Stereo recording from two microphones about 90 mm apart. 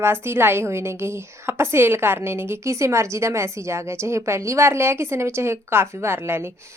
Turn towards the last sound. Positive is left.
turn(degrees=-25)  # may be behind; listen again after turning